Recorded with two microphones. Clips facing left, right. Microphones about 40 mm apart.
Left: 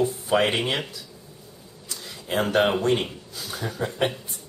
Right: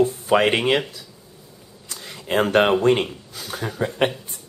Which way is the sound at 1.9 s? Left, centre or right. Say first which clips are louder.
Right 5 dB; right.